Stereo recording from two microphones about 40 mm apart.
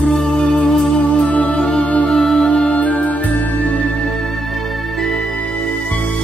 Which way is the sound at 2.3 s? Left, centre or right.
Left.